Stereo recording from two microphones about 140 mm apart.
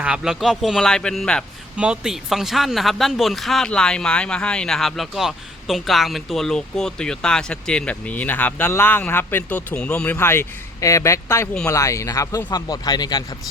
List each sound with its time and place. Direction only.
0.0 s speech: 5° right (ahead or behind)
1.7 s speech: 5° right (ahead or behind); by 13.2 s 30° left (ahead or behind)